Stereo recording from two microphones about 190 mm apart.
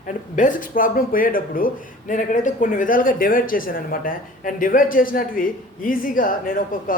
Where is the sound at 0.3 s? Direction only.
45° left (ahead or behind).